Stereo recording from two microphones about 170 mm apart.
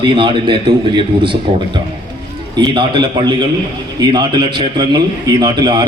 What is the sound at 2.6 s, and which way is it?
A man's voice, 25° right (ahead or behind).